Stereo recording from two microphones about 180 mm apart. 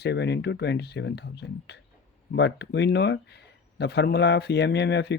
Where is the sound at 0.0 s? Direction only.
70° left (ahead or behind).